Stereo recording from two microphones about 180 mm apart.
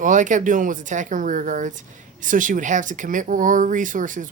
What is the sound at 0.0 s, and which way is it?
Speech, 45° right (ahead or behind).